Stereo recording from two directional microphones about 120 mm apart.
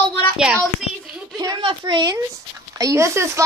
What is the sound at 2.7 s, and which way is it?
Child singing, 25° right (ahead or behind).